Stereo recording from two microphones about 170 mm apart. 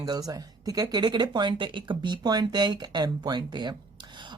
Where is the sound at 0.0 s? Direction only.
20° right (ahead or behind).